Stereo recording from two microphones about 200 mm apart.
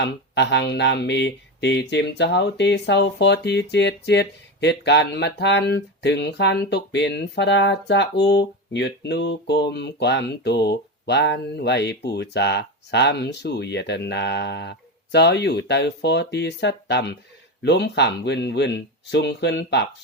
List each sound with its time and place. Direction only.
0.0 s speech: 60° left (ahead or behind)